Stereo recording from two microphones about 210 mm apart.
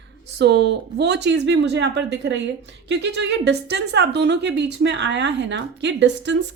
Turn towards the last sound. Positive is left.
turn(degrees=-55)  # may be behind; listen again after turning